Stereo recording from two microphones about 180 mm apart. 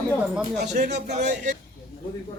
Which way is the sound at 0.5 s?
40° right (ahead or behind).